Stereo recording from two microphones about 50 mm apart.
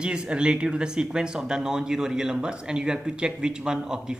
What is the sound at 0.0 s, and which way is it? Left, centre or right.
A man's voice, centre.